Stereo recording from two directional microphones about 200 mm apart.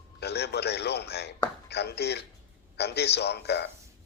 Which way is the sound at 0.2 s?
55° left (ahead or behind).